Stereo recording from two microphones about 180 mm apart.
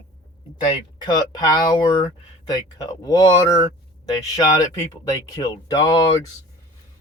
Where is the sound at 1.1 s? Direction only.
25° left (ahead or behind).